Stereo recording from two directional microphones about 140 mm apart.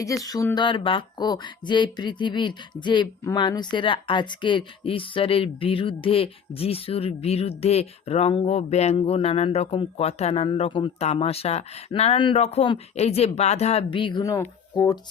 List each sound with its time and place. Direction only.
0.0 s speech: 25° left (ahead or behind); by 10.4 s 50° left (ahead or behind)
10.4 s speech: 35° left (ahead or behind)
14.3 s speech: 20° left (ahead or behind)